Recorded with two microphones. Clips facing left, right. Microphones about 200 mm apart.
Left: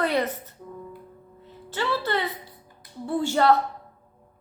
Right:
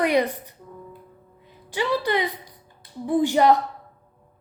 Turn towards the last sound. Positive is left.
turn(degrees=-15)  # may be behind; listen again after turning